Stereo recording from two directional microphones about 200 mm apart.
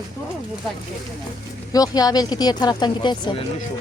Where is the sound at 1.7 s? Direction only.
20° left (ahead or behind).